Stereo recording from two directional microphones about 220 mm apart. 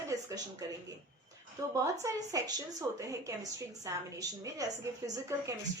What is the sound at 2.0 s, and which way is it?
A woman's voice, 15° right (ahead or behind).